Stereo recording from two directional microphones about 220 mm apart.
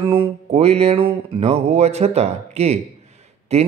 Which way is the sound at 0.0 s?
25° right (ahead or behind).